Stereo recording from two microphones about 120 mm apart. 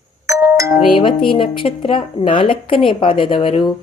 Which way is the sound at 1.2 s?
45° left (ahead or behind).